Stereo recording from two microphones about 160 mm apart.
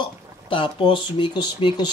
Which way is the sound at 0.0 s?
30° left (ahead or behind).